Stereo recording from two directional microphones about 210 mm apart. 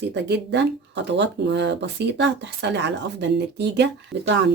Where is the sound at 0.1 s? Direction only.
55° right (ahead or behind).